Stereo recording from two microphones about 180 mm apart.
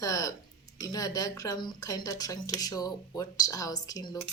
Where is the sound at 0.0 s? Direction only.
20° left (ahead or behind).